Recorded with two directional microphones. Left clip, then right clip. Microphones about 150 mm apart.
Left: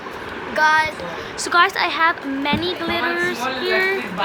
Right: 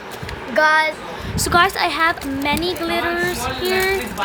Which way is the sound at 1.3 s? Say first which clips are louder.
Right 1 dB; 65° right (ahead or behind).